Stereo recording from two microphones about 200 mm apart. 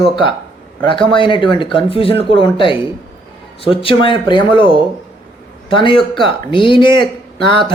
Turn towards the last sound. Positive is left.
turn(degrees=25)  # may be behind; listen again after turning